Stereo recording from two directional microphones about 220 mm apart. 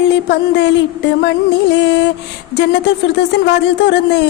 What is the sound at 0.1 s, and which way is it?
Speech, 50° left (ahead or behind).